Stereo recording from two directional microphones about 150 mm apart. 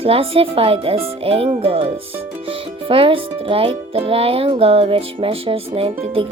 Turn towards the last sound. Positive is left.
turn(degrees=-40)  # may be behind; listen again after turning